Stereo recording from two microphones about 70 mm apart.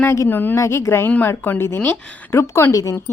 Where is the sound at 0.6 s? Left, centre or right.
Left.